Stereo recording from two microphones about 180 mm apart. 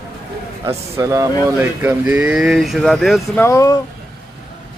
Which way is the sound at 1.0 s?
15° right (ahead or behind).